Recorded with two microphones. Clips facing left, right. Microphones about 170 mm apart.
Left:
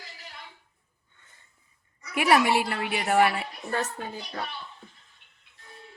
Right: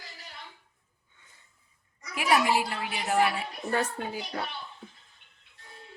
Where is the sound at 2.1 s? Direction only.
65° left (ahead or behind).